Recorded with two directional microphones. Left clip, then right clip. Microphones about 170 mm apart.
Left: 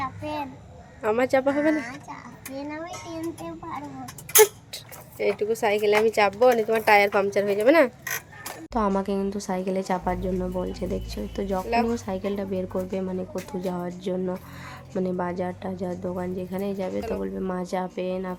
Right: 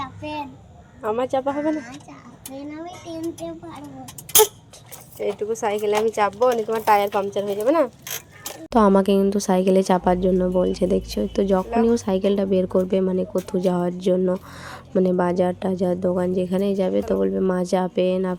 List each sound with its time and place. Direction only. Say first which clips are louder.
0.0 s a sound: even; 15° left (ahead or behind)
1.0 s speech: even; 10° left (ahead or behind)
5.2 s a woman's voice: even; 20° left (ahead or behind)
5.5 s speech: even; 5° left (ahead or behind)
8.7 s speech: right 9 dB; 40° right (ahead or behind)